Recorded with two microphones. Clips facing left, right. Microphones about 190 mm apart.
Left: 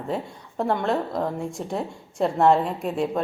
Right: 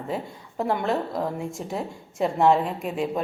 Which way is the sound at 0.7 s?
5° right (ahead or behind).